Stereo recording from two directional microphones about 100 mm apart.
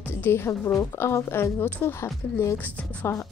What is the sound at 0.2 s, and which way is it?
A woman's voice, 25° left (ahead or behind).